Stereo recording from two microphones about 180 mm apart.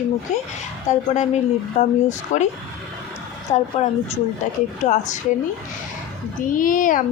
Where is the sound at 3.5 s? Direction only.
35° left (ahead or behind).